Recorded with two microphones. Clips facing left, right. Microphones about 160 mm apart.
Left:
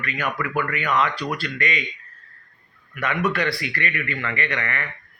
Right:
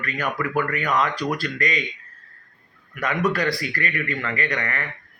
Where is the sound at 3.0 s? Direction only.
40° right (ahead or behind).